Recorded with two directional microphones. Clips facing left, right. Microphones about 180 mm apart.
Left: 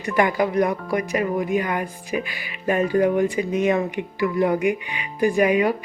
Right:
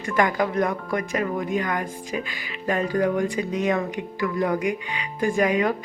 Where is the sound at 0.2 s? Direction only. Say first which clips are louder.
Left 2 dB; 15° left (ahead or behind).